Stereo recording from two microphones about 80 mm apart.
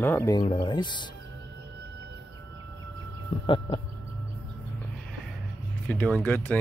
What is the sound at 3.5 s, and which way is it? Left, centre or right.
Chicken, left.